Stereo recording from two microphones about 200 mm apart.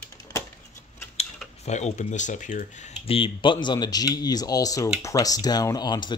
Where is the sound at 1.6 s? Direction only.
35° left (ahead or behind).